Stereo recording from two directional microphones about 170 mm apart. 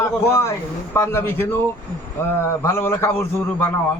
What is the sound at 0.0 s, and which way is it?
A man's voice, 15° left (ahead or behind).